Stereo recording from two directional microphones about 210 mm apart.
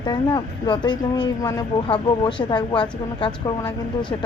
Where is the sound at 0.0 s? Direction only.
20° left (ahead or behind).